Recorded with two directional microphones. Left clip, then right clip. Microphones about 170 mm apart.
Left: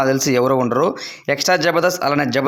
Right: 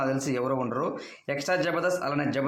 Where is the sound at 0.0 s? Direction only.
40° left (ahead or behind).